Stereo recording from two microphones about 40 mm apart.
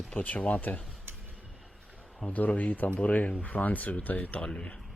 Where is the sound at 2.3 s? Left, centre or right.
Left.